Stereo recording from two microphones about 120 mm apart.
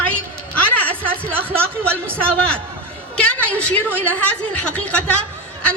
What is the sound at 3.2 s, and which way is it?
A woman's voice, 10° left (ahead or behind).